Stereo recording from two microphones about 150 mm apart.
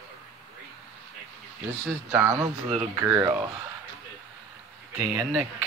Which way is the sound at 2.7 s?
35° right (ahead or behind).